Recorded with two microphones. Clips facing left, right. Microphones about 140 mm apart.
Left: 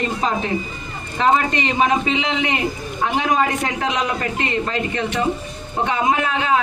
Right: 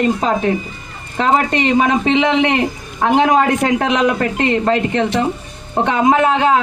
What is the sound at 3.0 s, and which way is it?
Speech, 75° right (ahead or behind).